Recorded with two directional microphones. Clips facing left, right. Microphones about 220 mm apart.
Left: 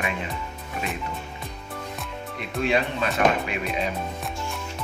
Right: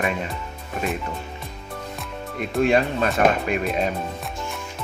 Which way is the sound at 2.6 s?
45° right (ahead or behind).